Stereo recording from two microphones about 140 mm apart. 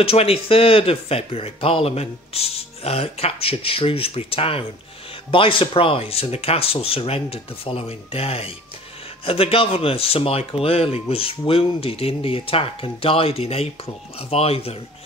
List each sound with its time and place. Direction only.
0.0 s speech: 45° left (ahead or behind)